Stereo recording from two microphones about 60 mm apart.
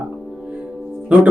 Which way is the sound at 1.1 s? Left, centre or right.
Right.